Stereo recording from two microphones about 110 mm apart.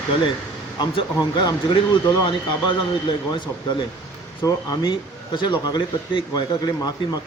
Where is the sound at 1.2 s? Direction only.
40° left (ahead or behind).